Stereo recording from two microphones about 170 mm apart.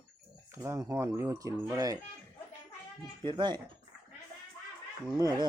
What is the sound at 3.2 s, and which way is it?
Speech, 25° right (ahead or behind).